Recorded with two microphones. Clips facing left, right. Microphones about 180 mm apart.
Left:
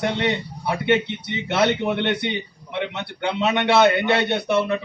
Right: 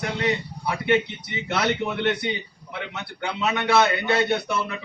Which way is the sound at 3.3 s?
25° left (ahead or behind).